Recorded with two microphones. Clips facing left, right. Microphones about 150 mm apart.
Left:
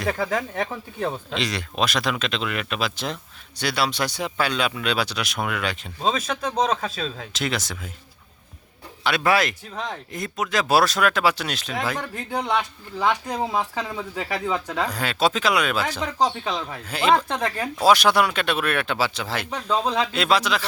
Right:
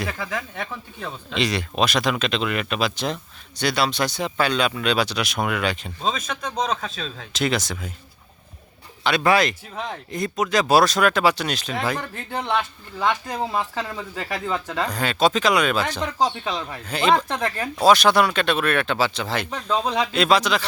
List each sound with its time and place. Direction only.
0.0 s speech: 45° left (ahead or behind)
1.3 s speech: centre (ahead or behind)
9.0 s speech: 5° left (ahead or behind)